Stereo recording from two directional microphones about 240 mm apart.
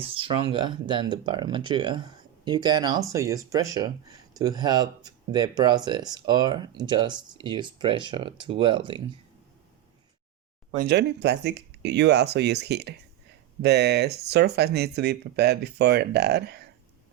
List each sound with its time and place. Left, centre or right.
0.0 s speech: right
10.8 s speech: right